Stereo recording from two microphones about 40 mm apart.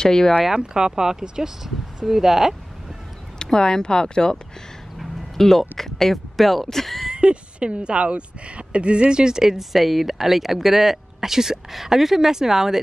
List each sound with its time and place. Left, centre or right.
0.0 s speech: centre
0.6 s speech: centre
3.3 s speech: centre
4.9 s speech: centre
7.2 s speech: right; by 12.7 s centre